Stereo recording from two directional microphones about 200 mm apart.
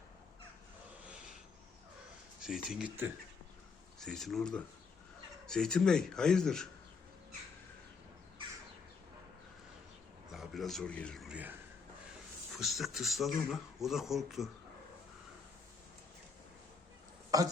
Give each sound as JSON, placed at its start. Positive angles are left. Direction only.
{"t": 2.4, "sound": "speech", "side_deg": 0}
{"t": 4.0, "sound": "speech", "side_deg": 0}
{"t": 10.3, "sound": "speech", "side_deg": 0}
{"t": 12.5, "sound": "speech", "side_deg": 0}
{"t": 17.3, "sound": "speech", "side_deg": -15}